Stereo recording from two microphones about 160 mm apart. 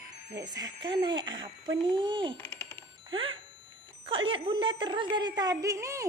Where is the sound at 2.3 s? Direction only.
10° left (ahead or behind).